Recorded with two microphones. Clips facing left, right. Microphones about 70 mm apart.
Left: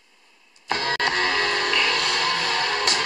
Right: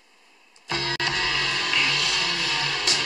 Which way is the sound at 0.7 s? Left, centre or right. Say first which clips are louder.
Left 4 dB; left.